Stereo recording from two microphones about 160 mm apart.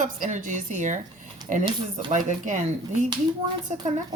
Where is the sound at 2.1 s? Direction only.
50° right (ahead or behind).